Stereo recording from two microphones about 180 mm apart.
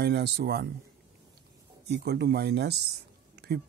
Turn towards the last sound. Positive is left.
turn(degrees=-65)  # may be behind; listen again after turning